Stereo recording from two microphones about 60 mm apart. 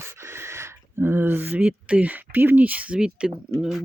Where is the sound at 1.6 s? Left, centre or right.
Right.